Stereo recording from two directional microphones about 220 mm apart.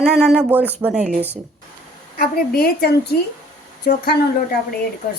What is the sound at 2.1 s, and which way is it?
A woman's voice, 45° left (ahead or behind).